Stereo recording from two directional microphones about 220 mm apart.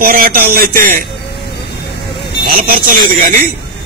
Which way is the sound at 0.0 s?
40° right (ahead or behind).